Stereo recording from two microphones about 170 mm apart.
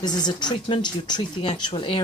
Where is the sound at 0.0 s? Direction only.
25° left (ahead or behind).